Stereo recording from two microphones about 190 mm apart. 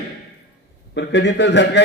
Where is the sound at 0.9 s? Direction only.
65° left (ahead or behind).